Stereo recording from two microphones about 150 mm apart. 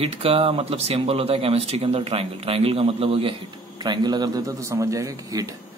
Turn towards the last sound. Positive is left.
turn(degrees=-25)  # may be behind; listen again after turning